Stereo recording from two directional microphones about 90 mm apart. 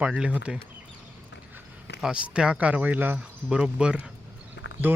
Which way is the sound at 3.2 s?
10° right (ahead or behind).